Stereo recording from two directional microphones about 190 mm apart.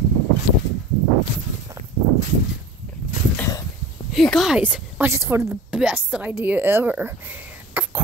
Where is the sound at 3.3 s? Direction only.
15° left (ahead or behind).